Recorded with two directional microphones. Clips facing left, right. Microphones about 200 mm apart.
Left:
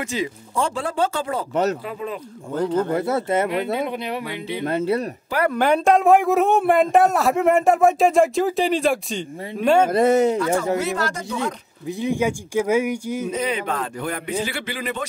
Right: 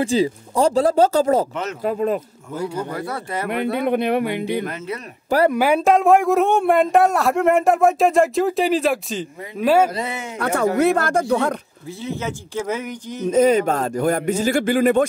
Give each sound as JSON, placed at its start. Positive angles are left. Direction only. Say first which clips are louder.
{"t": 0.0, "sound": "speech", "louder": "right 7 dB", "side_deg": -30}
{"t": 1.5, "sound": "speech", "louder": "left 7 dB", "side_deg": 40}
{"t": 1.9, "sound": "speech", "louder": "right 9 dB", "side_deg": -45}
{"t": 2.5, "sound": "speech", "louder": "left 4 dB", "side_deg": -10}
{"t": 2.9, "sound": "speech", "louder": "left 6 dB", "side_deg": 25}
{"t": 3.4, "sound": "speech", "louder": "right 2 dB", "side_deg": -55}
{"t": 4.6, "sound": "speech", "louder": "left 7 dB", "side_deg": 30}
{"t": 5.5, "sound": "a man's voice", "louder": "right 1 dB", "side_deg": -5}
{"t": 9.8, "sound": "speech", "louder": "left 11 dB", "side_deg": 50}
{"t": 10.4, "sound": "speech", "louder": "right 3 dB", "side_deg": -65}
{"t": 12.0, "sound": "speech", "louder": "left 5 dB", "side_deg": 15}
{"t": 13.3, "sound": "speech", "louder": "right 14 dB", "side_deg": -45}